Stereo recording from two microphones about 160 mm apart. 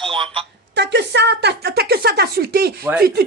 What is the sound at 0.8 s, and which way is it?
Speech, 90° right.